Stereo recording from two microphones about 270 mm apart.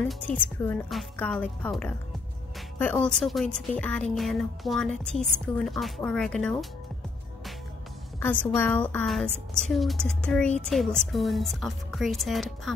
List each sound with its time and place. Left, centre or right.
0.1 s a woman's voice: centre
8.2 s a woman's voice: centre